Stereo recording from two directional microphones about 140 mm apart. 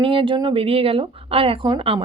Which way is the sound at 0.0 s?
40° right (ahead or behind).